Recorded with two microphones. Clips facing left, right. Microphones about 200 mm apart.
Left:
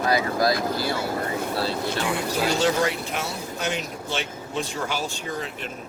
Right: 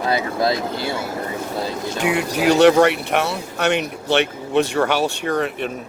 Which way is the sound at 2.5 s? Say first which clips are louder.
Right 12 dB; 70° right (ahead or behind).